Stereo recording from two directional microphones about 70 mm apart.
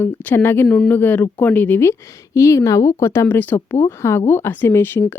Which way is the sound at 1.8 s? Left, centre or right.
Left.